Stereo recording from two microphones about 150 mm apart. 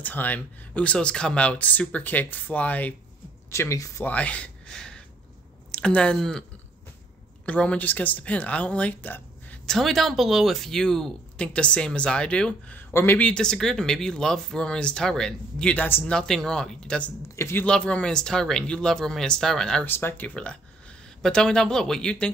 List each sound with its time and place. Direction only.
0.0 s speech: 10° left (ahead or behind)
4.1 s speech: 10° left (ahead or behind)
7.4 s speech: 10° left (ahead or behind)
17.4 s speech: 15° left (ahead or behind)
17.6 s speech: 5° left (ahead or behind)